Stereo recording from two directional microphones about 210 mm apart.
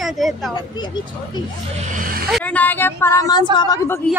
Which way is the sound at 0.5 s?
20° left (ahead or behind).